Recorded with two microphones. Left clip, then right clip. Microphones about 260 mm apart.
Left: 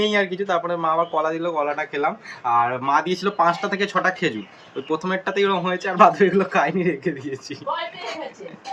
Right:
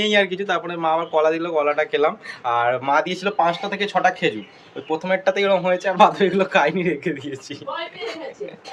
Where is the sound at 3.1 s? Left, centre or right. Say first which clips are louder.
Even; right.